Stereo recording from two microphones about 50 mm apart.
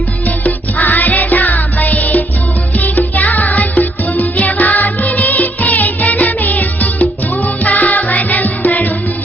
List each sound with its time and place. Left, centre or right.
0.4 s music: left